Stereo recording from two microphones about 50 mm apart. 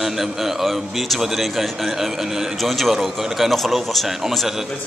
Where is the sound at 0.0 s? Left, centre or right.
Centre.